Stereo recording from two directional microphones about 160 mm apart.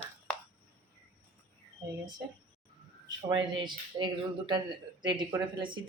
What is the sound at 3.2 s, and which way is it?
A woman's voice, 25° right (ahead or behind).